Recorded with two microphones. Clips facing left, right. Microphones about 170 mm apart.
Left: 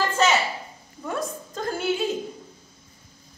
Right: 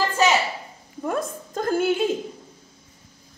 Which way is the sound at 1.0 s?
50° right (ahead or behind).